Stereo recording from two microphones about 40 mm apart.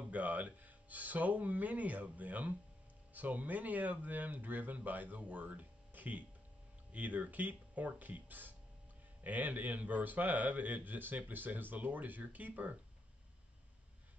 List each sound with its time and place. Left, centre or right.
0.1 s a man's voice: right